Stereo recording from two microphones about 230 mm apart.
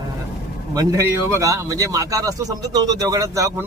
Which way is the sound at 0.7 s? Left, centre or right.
Centre.